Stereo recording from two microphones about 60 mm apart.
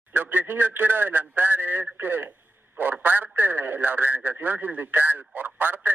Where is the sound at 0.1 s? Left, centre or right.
Right.